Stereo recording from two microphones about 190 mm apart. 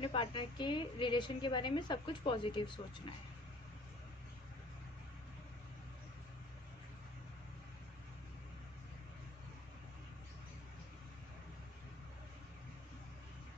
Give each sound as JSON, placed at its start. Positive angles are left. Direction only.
{"t": 0.0, "sound": "a woman's voice", "side_deg": 25}